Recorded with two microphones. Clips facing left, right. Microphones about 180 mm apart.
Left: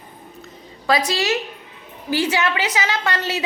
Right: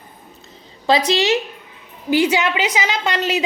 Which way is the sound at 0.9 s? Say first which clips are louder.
Right 4 dB; 20° right (ahead or behind).